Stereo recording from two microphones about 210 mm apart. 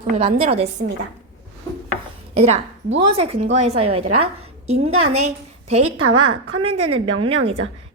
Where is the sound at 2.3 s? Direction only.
30° right (ahead or behind).